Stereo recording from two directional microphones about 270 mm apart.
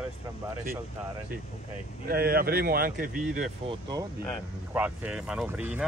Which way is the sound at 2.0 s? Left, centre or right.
Right.